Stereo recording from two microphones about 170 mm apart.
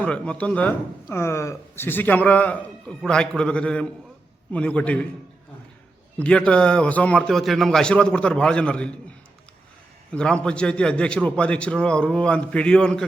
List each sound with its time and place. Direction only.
0.0 s speech: 5° left (ahead or behind)
6.1 s a man's voice: 5° left (ahead or behind)
10.1 s speech: 5° left (ahead or behind)